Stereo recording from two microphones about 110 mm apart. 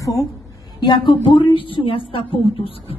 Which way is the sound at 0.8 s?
45° left (ahead or behind).